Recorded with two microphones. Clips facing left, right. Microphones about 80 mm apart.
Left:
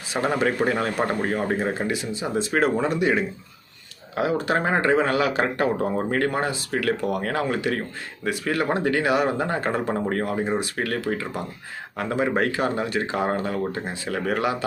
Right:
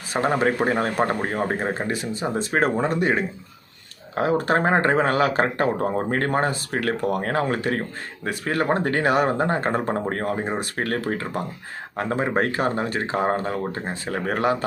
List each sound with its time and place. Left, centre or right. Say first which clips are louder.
0.3 s speech: right 1 dB; right